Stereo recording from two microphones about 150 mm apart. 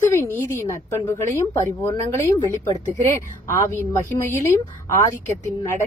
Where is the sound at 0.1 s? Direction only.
15° left (ahead or behind).